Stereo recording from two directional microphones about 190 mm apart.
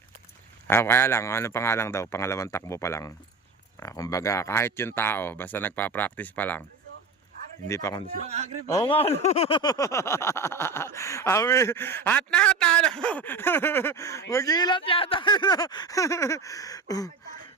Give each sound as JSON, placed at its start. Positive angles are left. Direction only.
{"t": 0.7, "sound": "speech", "side_deg": 10}
{"t": 7.7, "sound": "speech", "side_deg": 15}
{"t": 8.2, "sound": "a man's voice", "side_deg": -35}
{"t": 8.8, "sound": "speech", "side_deg": 30}